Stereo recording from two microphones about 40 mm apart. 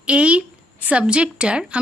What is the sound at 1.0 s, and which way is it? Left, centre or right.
Speech, right.